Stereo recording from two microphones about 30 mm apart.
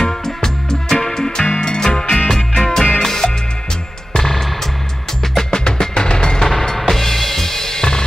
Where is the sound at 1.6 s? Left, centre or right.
Left.